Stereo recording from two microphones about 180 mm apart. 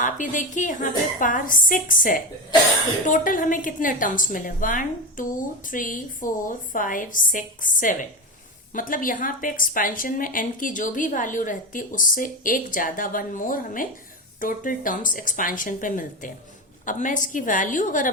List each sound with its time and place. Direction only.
0.0 s a woman's voice: 45° left (ahead or behind)